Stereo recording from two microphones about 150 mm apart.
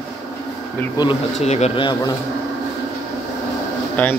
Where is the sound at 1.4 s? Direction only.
45° left (ahead or behind).